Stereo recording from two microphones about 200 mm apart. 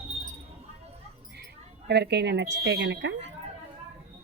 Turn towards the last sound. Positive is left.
turn(degrees=-65)  # may be behind; listen again after turning